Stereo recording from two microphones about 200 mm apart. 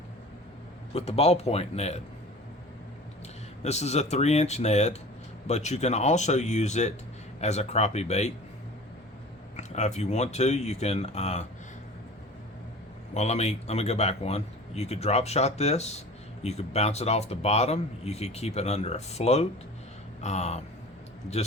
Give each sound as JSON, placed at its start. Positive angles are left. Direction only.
{"t": 0.9, "sound": "speech", "side_deg": 30}
{"t": 3.6, "sound": "speech", "side_deg": 35}
{"t": 9.6, "sound": "speech", "side_deg": 35}
{"t": 13.1, "sound": "speech", "side_deg": 35}